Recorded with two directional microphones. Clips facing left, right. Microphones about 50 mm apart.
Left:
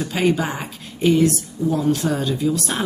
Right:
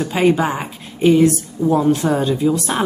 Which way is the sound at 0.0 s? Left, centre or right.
Centre.